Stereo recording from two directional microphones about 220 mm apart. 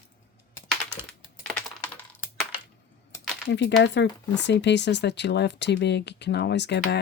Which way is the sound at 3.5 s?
50° left (ahead or behind).